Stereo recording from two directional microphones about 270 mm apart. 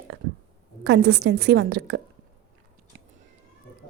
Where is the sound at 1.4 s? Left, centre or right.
Right.